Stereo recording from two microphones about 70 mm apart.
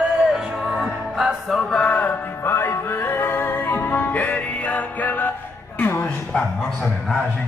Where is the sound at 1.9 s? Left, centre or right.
Left.